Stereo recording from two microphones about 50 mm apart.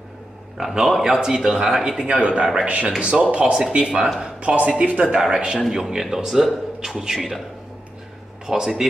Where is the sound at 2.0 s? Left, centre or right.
Right.